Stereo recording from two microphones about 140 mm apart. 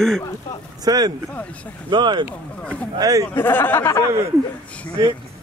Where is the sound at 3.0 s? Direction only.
25° right (ahead or behind).